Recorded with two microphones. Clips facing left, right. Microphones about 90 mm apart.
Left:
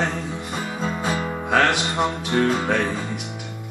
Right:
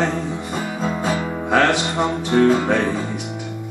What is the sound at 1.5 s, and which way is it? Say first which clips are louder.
Music: right 2 dB; centre (ahead or behind).